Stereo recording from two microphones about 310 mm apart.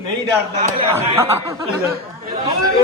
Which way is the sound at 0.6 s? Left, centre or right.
Centre.